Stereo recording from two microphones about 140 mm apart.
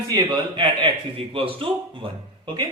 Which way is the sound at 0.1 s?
35° right (ahead or behind).